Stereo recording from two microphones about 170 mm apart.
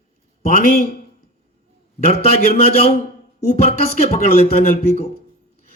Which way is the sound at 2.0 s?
40° left (ahead or behind).